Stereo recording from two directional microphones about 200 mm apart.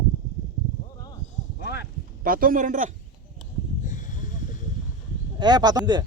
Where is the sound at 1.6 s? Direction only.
55° left (ahead or behind).